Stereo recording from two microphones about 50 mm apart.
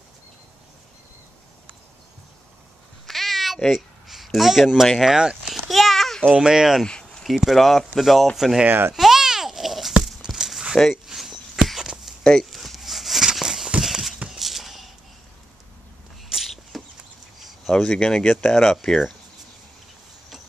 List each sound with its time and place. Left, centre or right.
3.1 s meow: centre
4.9 s speech: centre
5.5 s babbling: centre
6.3 s speech: centre
6.8 s a sound: centre
7.4 s speech: centre
8.6 s a child's voice: right
8.9 s babbling: centre
10.0 s a sound: centre
12.2 s speech: centre
12.4 s a sound: centre
16.3 s a sound: centre
17.7 s speech: centre